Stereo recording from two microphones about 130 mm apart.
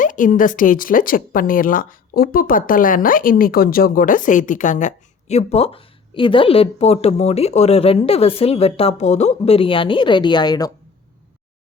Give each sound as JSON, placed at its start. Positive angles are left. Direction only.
{"t": 0.0, "sound": "a woman's voice", "side_deg": 90}